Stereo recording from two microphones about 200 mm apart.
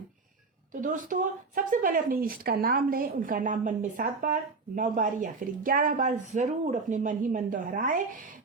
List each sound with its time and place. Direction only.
0.7 s speech: 40° right (ahead or behind)